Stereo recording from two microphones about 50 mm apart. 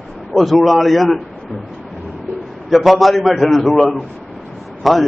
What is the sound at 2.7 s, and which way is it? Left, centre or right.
A man's voice, centre.